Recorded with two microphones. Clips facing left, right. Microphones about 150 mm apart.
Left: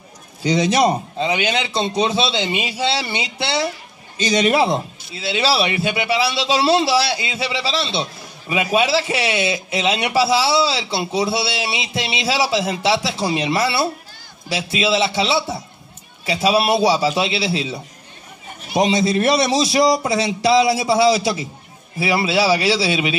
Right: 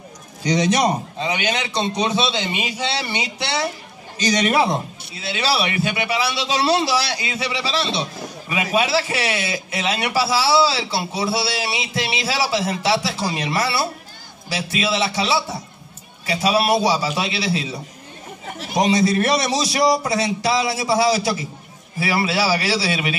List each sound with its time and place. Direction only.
0.4 s a man's voice: 30° left (ahead or behind)
18.8 s a man's voice: 25° left (ahead or behind)